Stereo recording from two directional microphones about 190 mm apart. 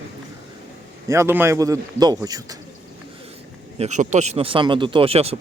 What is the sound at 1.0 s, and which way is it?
A man's voice, 15° right (ahead or behind).